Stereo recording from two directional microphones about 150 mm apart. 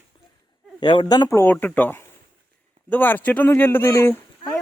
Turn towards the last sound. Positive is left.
turn(degrees=15)  # may be behind; listen again after turning